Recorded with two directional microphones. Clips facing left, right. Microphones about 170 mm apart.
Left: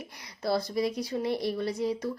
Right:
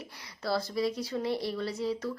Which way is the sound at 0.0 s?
15° left (ahead or behind).